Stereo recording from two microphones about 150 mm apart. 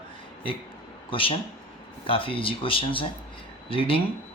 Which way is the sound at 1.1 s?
35° left (ahead or behind).